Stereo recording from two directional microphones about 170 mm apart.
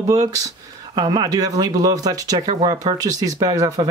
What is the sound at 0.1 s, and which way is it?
Speech, 20° right (ahead or behind).